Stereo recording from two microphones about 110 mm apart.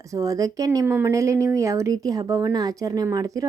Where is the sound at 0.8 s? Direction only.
20° right (ahead or behind).